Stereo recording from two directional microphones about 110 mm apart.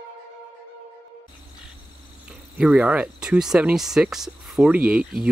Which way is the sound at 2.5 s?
10° right (ahead or behind).